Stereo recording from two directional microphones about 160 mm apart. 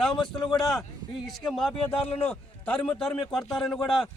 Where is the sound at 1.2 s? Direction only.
Centre (ahead or behind).